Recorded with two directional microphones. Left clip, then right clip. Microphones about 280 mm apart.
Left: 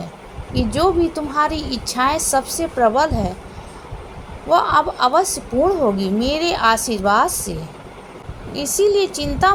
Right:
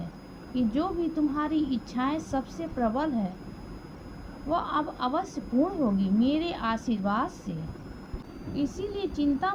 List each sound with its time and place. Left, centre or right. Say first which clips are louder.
0.5 s speech: left 12 dB; right
4.4 s speech: left 14 dB; right
8.5 s speech: left 16 dB; right